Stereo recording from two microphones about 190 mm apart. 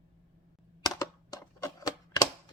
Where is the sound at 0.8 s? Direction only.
20° left (ahead or behind).